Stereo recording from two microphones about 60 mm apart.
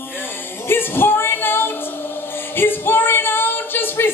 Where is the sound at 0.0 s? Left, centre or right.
Left.